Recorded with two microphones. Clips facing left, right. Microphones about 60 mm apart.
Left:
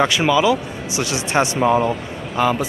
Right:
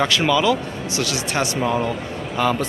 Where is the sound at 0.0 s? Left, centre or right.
Centre.